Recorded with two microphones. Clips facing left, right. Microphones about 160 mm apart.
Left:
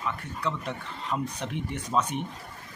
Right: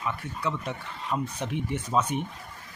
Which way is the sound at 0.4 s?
5° right (ahead or behind).